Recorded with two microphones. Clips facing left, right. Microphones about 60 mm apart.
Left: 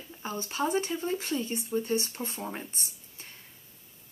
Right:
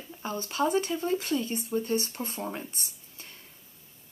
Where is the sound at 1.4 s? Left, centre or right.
Right.